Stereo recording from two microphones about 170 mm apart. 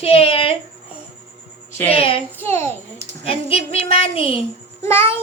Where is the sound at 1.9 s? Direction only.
35° left (ahead or behind).